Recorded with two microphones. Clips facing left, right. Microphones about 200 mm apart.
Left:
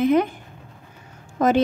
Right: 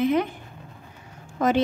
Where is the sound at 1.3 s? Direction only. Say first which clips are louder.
Left 3 dB; 45° left (ahead or behind).